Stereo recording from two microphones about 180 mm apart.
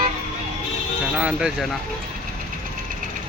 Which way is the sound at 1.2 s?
5° right (ahead or behind).